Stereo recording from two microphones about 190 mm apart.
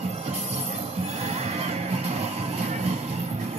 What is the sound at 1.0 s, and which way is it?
Music, 35° right (ahead or behind).